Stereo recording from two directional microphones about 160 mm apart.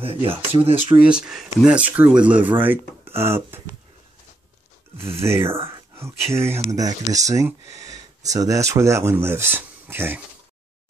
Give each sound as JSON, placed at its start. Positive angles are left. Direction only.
{"t": 0.0, "sound": "speech", "side_deg": -35}
{"t": 0.7, "sound": "speech", "side_deg": -10}
{"t": 5.2, "sound": "speech", "side_deg": -15}